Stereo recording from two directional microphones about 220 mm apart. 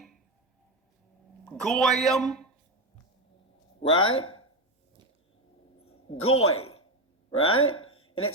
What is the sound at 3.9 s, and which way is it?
Speech, 65° left (ahead or behind).